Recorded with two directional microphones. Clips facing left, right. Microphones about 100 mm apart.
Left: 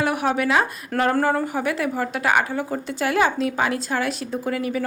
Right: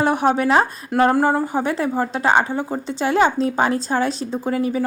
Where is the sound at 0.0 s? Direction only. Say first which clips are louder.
Right 4 dB; 30° right (ahead or behind).